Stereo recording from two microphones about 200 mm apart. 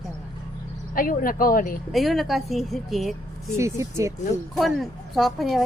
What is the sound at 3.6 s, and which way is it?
Speech, 15° right (ahead or behind).